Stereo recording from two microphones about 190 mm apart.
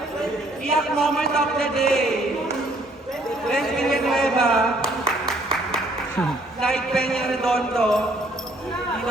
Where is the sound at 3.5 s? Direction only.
Centre (ahead or behind).